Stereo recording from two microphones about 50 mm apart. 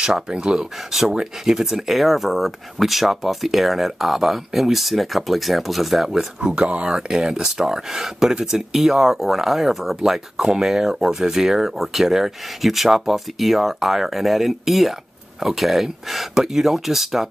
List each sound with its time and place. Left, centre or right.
0.0 s speech: centre
6.7 s speech: centre